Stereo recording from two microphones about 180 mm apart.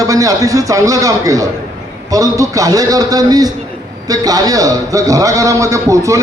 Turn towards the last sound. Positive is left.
turn(degrees=-15)  # may be behind; listen again after turning